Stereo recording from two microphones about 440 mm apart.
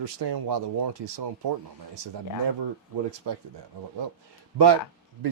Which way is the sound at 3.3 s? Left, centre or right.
Right.